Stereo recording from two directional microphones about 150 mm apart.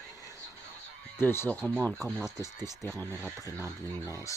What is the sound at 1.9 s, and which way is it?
Speech, centre (ahead or behind).